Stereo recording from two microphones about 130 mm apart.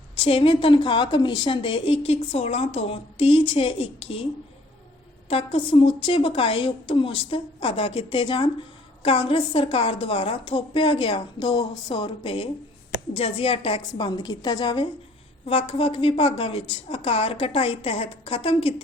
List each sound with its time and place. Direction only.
0.2 s a woman's voice: 45° left (ahead or behind)
5.3 s a woman's voice: 50° left (ahead or behind)
14.1 s a woman's voice: 35° left (ahead or behind)
15.4 s a woman's voice: 50° left (ahead or behind)